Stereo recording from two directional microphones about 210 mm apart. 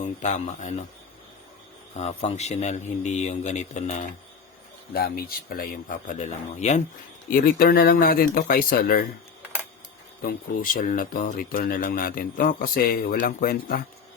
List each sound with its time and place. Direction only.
0.0 s a man's voice: 35° left (ahead or behind)
2.0 s a man's voice: 30° left (ahead or behind)
4.9 s a man's voice: 45° left (ahead or behind)
7.3 s a man's voice: 45° left (ahead or behind)
10.2 s a man's voice: 40° left (ahead or behind)